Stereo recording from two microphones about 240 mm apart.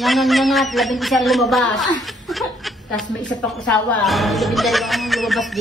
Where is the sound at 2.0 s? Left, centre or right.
Centre.